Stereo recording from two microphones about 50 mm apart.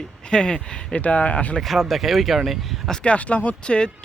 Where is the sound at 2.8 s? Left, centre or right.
Centre.